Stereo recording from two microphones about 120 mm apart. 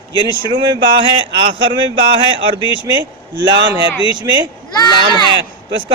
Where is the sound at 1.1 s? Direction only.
40° right (ahead or behind).